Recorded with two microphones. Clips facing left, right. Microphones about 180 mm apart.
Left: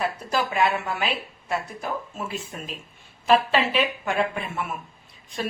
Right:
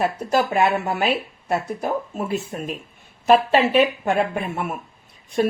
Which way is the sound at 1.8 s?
40° right (ahead or behind).